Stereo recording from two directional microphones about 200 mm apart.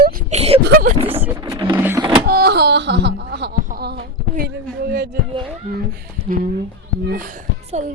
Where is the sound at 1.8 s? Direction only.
10° right (ahead or behind).